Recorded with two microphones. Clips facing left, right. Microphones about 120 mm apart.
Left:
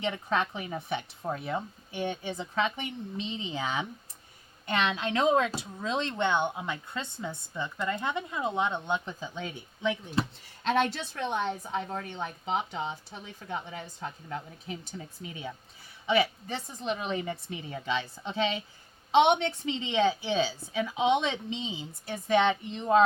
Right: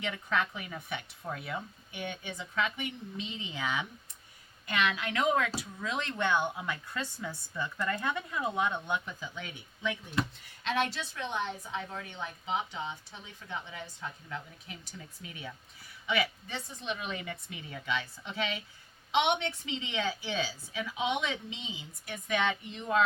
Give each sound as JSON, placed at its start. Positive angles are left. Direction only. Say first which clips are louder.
{"t": 0.0, "sound": "a woman's voice", "louder": "left 3 dB", "side_deg": 30}
{"t": 10.9, "sound": "a woman's voice", "louder": "left 4 dB", "side_deg": 50}